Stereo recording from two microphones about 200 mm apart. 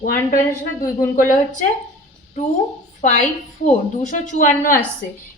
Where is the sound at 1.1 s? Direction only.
40° left (ahead or behind).